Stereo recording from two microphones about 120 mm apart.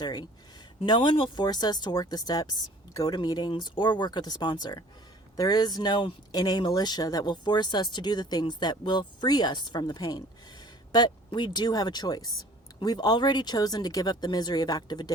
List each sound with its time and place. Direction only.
0.0 s speech: 35° left (ahead or behind)